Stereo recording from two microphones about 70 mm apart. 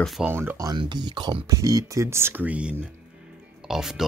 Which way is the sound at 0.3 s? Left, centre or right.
Right.